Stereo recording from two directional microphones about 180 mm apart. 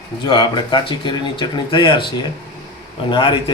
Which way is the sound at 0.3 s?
25° left (ahead or behind).